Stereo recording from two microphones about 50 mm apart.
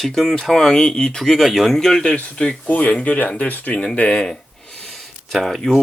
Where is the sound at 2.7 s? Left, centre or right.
Left.